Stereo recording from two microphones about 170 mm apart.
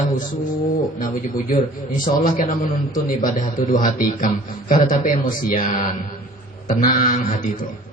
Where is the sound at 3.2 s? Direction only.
50° left (ahead or behind).